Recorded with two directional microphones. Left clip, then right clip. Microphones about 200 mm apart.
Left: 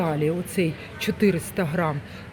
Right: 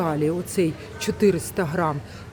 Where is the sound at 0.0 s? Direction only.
10° right (ahead or behind).